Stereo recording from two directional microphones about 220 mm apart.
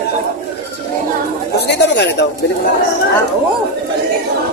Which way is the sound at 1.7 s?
50° left (ahead or behind).